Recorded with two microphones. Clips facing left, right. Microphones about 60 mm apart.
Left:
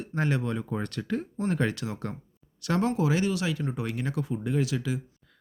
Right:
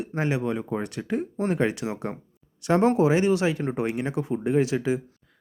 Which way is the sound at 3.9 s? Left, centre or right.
Right.